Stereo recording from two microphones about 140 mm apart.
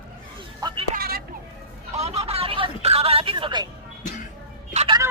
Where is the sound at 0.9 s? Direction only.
90° right.